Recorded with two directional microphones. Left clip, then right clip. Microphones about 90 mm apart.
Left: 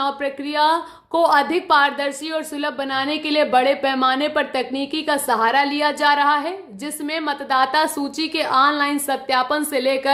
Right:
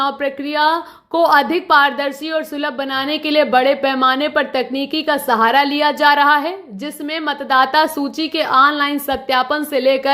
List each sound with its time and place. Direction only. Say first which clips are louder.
0.0 s a woman's voice: right 4 dB; 30° right (ahead or behind)
5.4 s speech: right 5 dB; 40° right (ahead or behind)
7.9 s a woman's voice: right 3 dB; 25° right (ahead or behind)